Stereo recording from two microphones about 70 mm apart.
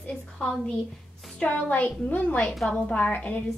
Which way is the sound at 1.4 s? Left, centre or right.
Left.